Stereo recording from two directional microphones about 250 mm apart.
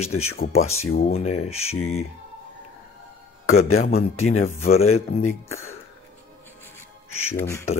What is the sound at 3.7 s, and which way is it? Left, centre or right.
Speech, left.